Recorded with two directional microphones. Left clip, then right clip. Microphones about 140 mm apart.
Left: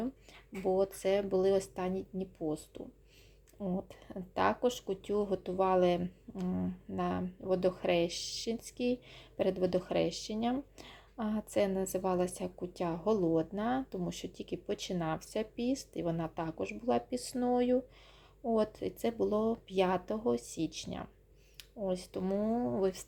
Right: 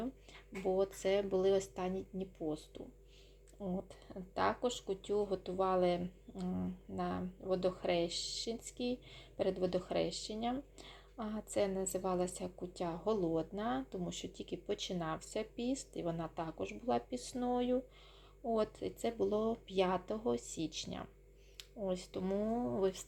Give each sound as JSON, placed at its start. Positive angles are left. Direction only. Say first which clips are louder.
{"t": 0.6, "sound": "speech", "louder": "left 4 dB", "side_deg": 20}